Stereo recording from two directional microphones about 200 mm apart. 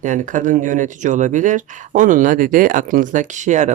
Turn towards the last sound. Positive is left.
turn(degrees=-35)  # may be behind; listen again after turning